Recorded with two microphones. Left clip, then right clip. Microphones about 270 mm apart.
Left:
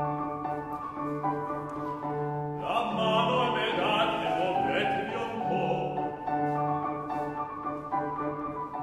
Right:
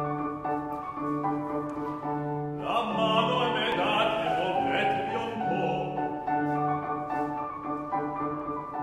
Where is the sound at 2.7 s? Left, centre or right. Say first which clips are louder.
Right 1 dB; right.